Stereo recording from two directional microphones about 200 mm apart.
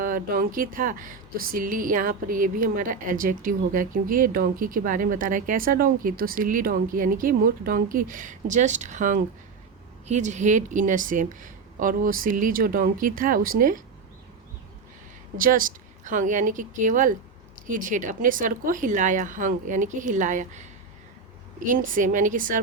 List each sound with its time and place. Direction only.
0.0 s speech: 45° right (ahead or behind)
15.4 s speech: 45° right (ahead or behind)